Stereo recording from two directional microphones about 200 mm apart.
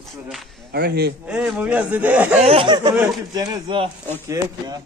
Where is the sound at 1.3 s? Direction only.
5° right (ahead or behind).